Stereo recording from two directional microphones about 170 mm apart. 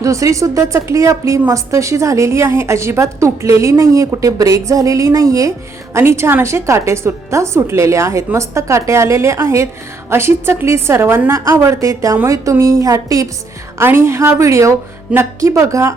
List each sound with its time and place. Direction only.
0.0 s a woman's voice: 20° right (ahead or behind)